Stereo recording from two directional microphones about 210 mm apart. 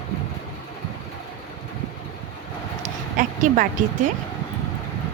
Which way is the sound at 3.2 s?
40° right (ahead or behind).